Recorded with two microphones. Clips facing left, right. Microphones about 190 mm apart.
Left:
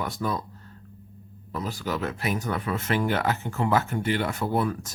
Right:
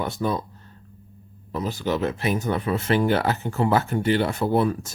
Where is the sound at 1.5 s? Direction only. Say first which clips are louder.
Right 5 dB; 25° right (ahead or behind).